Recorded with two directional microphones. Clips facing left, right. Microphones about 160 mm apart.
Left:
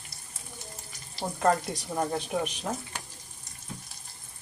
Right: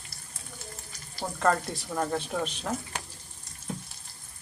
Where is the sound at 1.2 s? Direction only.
15° left (ahead or behind).